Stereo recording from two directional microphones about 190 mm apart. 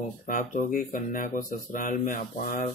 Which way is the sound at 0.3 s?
45° left (ahead or behind).